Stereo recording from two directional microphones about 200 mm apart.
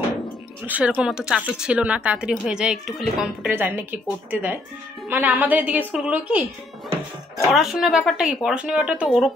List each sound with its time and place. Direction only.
0.7 s a woman's voice: 10° right (ahead or behind)
7.5 s a woman's voice: centre (ahead or behind)